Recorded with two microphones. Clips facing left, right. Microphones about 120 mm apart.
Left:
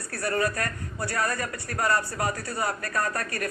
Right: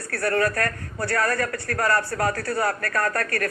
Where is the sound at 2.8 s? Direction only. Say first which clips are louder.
Right 4 dB; 20° left (ahead or behind).